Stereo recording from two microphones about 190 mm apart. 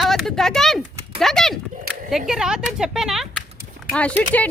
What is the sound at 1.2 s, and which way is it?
Speech, centre (ahead or behind).